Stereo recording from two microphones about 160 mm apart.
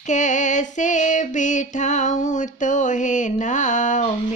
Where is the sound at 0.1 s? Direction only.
50° left (ahead or behind).